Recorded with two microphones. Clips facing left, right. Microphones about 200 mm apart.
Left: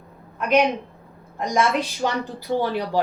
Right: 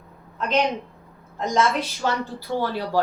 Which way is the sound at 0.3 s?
10° left (ahead or behind).